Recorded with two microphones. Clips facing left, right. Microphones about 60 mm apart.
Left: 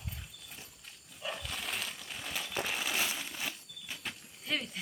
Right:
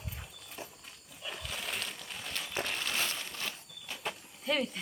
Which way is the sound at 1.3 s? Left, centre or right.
Centre.